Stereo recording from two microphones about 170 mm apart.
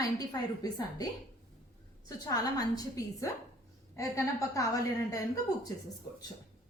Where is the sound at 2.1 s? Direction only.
20° left (ahead or behind).